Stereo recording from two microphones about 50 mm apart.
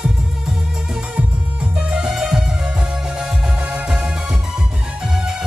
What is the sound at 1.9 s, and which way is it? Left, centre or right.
Music, centre.